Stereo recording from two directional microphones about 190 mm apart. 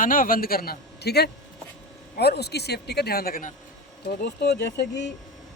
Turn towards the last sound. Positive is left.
turn(degrees=60)  # may be behind; listen again after turning